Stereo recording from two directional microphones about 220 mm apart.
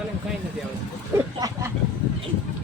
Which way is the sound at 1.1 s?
10° right (ahead or behind).